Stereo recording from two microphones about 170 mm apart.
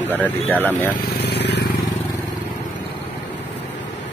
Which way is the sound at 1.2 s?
80° left.